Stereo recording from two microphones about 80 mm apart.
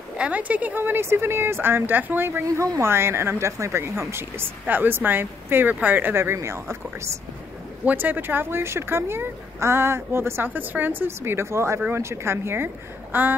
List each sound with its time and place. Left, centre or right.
0.2 s speech: centre
2.4 s speech: right
7.8 s speech: right